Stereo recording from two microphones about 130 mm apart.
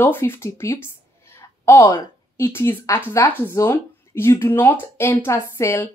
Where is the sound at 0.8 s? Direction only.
20° left (ahead or behind).